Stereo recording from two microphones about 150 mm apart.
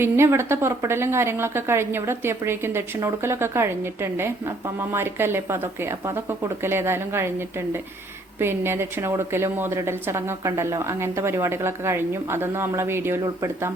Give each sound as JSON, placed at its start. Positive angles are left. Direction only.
{"t": 0.0, "sound": "a woman's voice", "side_deg": -15}